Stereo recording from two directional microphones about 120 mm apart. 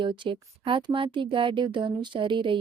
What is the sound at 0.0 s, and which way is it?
Speech, 45° right (ahead or behind).